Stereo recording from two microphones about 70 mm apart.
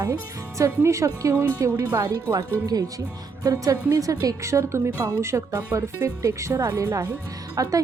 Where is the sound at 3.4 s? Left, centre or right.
Right.